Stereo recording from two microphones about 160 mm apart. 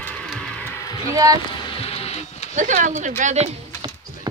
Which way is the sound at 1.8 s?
40° left (ahead or behind).